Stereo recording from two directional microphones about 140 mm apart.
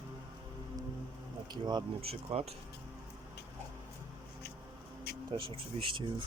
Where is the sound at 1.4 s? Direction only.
30° right (ahead or behind).